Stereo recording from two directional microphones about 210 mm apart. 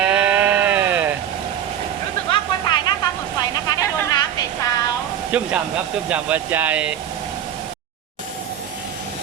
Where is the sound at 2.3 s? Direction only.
20° left (ahead or behind).